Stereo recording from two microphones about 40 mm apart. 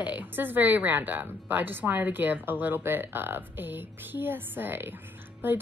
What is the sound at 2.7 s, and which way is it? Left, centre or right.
A woman's voice, right.